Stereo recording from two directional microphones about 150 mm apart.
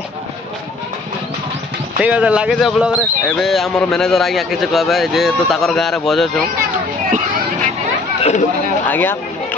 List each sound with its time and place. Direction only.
2.0 s speech: 10° right (ahead or behind)
8.2 s chatter: 50° left (ahead or behind)
8.8 s chatter: 10° left (ahead or behind)